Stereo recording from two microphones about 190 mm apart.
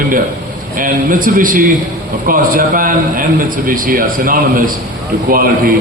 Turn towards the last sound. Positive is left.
turn(degrees=-50)  # may be behind; listen again after turning